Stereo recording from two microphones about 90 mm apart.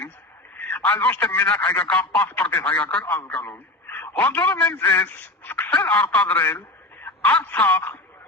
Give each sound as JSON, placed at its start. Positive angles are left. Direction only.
{"t": 0.5, "sound": "a sound", "side_deg": 20}
{"t": 1.4, "sound": "a man's voice", "side_deg": 20}
{"t": 3.2, "sound": "speech", "side_deg": 10}
{"t": 3.5, "sound": "radio", "side_deg": 25}
{"t": 4.2, "sound": "a man's voice", "side_deg": 20}